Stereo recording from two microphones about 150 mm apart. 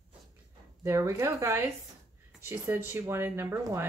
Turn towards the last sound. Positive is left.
turn(degrees=-15)  # may be behind; listen again after turning